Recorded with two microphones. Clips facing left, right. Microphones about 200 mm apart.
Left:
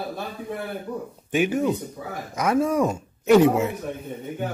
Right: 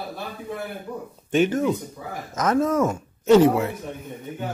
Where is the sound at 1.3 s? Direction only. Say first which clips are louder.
Right 2 dB; 10° left (ahead or behind).